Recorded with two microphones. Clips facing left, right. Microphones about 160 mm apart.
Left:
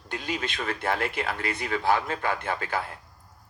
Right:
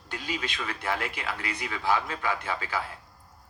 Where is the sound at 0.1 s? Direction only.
50° left (ahead or behind).